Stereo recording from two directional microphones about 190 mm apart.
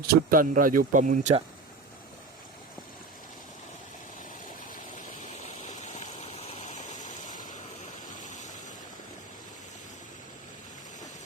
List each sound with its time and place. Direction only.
0.1 s speech: 45° right (ahead or behind)
5.6 s stream: 40° left (ahead or behind)
8.2 s a sound: 40° left (ahead or behind)